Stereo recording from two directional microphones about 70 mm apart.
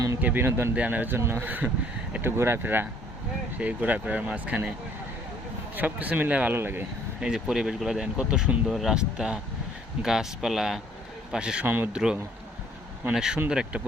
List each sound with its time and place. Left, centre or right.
0.2 s speech: right
0.4 s speech: right
0.8 s speech: right
3.6 s speech: right
5.7 s speech: right
7.2 s speech: centre
8.6 s speech: centre
11.6 s speech: right
13.1 s speech: centre